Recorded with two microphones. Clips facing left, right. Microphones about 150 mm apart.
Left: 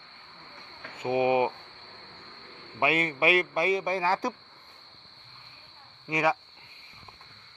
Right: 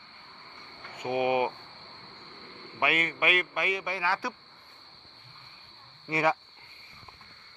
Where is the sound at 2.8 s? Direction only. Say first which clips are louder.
Left 3 dB; 30° left (ahead or behind).